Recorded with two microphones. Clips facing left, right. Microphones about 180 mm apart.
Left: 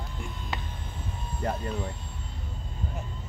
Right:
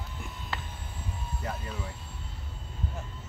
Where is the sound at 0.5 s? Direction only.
20° left (ahead or behind).